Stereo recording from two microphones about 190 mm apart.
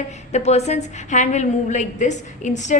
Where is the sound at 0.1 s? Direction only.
35° left (ahead or behind).